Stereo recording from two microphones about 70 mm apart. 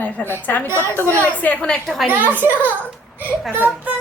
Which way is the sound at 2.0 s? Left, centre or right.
Right.